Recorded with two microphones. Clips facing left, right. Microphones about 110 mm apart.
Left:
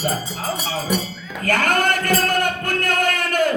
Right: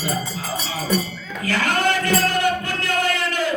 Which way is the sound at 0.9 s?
15° left (ahead or behind).